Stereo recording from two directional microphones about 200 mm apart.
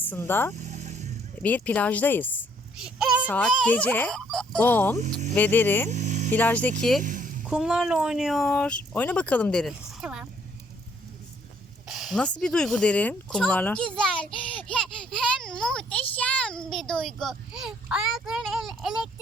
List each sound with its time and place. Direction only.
0.0 s speech: 10° left (ahead or behind)
0.6 s vehicle: 35° right (ahead or behind)
1.4 s speech: 5° left (ahead or behind)
2.7 s a sound: 5° right (ahead or behind)
3.2 s speech: 5° left (ahead or behind)
5.9 s a sound: 35° right (ahead or behind)
6.3 s speech: 10° left (ahead or behind)
7.0 s a sound: 40° right (ahead or behind)
7.4 s speech: 5° right (ahead or behind)
11.9 s speech: centre (ahead or behind)